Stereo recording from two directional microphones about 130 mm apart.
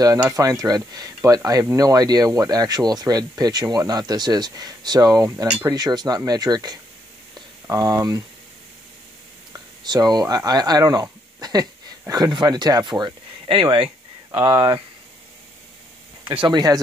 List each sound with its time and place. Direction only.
0.0 s speech: 30° right (ahead or behind)
9.8 s speech: 30° right (ahead or behind)
16.4 s speech: 30° right (ahead or behind)